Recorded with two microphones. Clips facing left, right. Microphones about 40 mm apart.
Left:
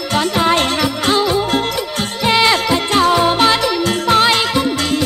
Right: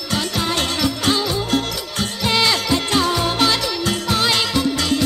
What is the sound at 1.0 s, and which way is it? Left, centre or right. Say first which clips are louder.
Music: left 5 dB; left.